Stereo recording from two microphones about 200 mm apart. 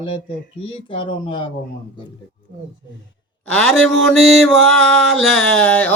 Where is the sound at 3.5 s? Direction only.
5° left (ahead or behind).